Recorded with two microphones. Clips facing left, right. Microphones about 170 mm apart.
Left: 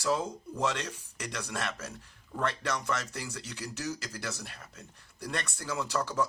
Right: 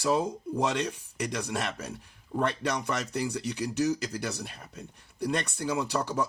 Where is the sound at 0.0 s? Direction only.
15° right (ahead or behind).